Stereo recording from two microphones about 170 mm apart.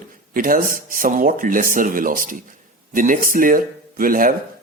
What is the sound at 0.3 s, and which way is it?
A man's voice, 55° right (ahead or behind).